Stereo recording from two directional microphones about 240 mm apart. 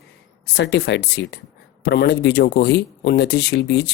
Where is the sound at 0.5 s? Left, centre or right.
Left.